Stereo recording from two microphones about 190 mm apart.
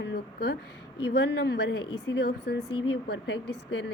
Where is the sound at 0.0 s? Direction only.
65° left (ahead or behind).